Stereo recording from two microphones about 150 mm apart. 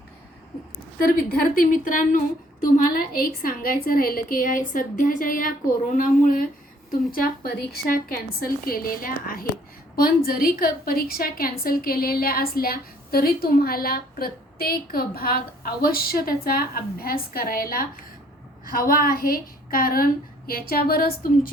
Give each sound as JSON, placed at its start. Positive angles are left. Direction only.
{"t": 1.0, "sound": "a woman's voice", "side_deg": 70}
{"t": 3.7, "sound": "a woman's voice", "side_deg": 70}
{"t": 20.5, "sound": "speech", "side_deg": 90}